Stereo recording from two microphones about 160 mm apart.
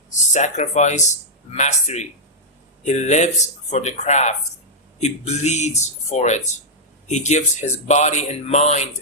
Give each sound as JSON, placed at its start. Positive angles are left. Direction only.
{"t": 0.1, "sound": "speech", "side_deg": 50}